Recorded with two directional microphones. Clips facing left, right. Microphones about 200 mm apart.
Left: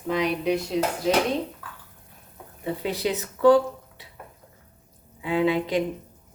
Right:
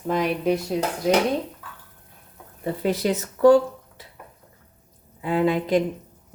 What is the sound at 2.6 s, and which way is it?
Speech, 45° right (ahead or behind).